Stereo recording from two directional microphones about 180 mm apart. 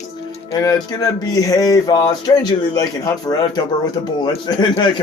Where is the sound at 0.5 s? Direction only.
20° left (ahead or behind).